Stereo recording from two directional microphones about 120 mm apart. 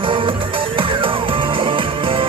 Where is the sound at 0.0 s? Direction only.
45° right (ahead or behind).